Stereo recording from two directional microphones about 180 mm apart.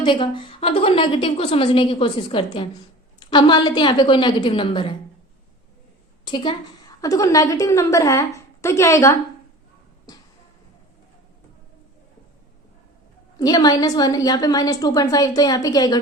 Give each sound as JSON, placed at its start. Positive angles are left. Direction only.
{"t": 0.0, "sound": "a woman's voice", "side_deg": 25}
{"t": 6.2, "sound": "a woman's voice", "side_deg": 25}
{"t": 10.1, "sound": "music", "side_deg": 20}
{"t": 13.4, "sound": "a woman's voice", "side_deg": 20}